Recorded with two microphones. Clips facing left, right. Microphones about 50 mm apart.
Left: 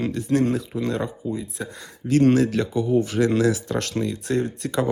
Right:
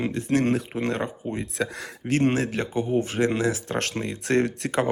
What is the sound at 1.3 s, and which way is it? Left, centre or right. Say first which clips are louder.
Speech: right 2 dB; right.